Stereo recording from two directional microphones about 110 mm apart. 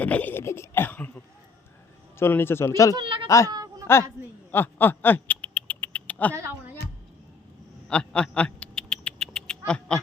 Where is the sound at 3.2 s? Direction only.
30° left (ahead or behind).